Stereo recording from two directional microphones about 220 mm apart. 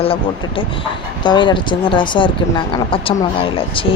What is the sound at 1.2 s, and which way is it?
A woman's voice, 20° left (ahead or behind).